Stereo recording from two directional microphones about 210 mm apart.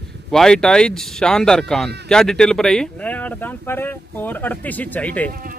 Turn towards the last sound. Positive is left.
turn(degrees=5)  # may be behind; listen again after turning